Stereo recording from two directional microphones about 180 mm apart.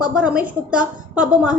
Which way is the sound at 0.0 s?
5° right (ahead or behind).